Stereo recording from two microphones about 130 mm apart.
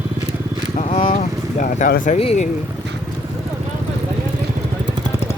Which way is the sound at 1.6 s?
85° left.